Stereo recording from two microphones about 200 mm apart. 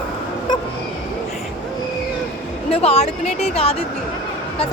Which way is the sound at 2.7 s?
30° left (ahead or behind).